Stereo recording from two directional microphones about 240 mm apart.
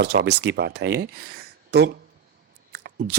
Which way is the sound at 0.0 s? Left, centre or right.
Right.